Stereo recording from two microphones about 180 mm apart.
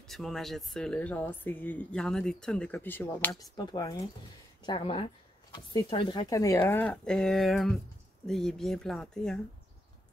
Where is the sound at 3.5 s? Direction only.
20° left (ahead or behind); by 9.4 s 5° left (ahead or behind).